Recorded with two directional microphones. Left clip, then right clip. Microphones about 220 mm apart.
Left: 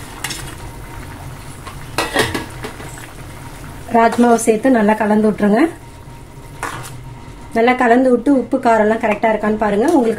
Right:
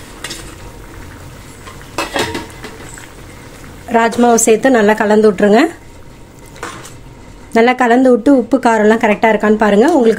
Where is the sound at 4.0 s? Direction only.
40° right (ahead or behind).